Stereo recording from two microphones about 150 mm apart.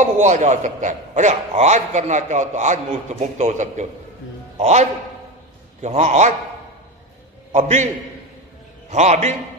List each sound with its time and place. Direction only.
0.0 s a man's voice: 50° right (ahead or behind)
7.5 s a man's voice: 50° right (ahead or behind)
8.9 s a man's voice: 50° right (ahead or behind)